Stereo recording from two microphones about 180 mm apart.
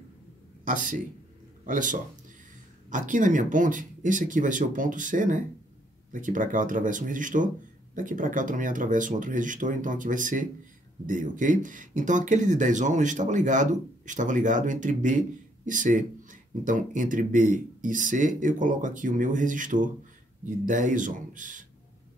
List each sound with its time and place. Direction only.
0.7 s speech: 45° right (ahead or behind)